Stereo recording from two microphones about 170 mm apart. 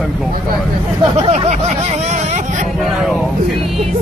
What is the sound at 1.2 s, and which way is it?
Speech, 35° right (ahead or behind).